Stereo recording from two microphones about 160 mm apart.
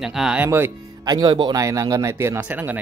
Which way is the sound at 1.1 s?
30° right (ahead or behind).